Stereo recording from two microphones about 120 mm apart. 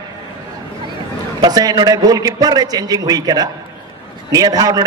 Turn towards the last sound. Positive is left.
turn(degrees=-30)  # may be behind; listen again after turning